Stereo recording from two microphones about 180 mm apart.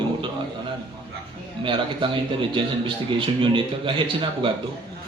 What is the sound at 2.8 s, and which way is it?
A man's voice, 30° right (ahead or behind).